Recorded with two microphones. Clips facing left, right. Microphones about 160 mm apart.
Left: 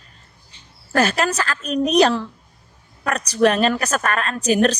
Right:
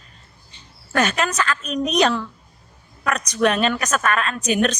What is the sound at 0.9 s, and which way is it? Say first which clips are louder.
A woman's voice: left 2 dB; 35° left (ahead or behind).